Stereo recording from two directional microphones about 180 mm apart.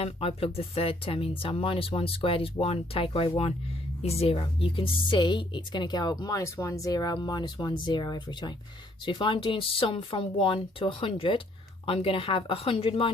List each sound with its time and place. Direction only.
0.0 s speech: 35° left (ahead or behind)